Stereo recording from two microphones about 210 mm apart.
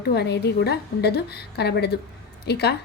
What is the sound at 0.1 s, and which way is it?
A woman's voice, 50° left (ahead or behind).